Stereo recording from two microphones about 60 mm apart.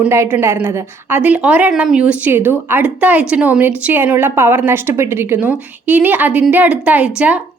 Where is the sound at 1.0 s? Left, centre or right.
Right.